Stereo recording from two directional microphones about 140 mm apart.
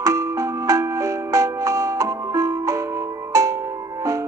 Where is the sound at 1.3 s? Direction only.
20° right (ahead or behind).